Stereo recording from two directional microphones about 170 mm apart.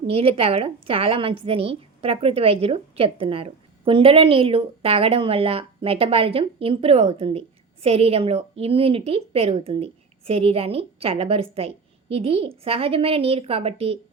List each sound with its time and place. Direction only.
0.1 s a woman's voice: 35° right (ahead or behind)